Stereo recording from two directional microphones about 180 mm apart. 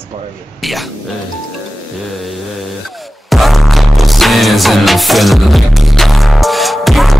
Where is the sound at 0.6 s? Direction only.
Centre (ahead or behind).